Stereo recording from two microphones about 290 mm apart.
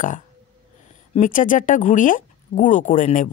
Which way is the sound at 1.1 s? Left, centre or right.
Left.